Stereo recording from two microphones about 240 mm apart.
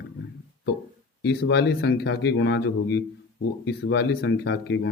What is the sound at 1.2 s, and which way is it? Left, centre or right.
Speech, left.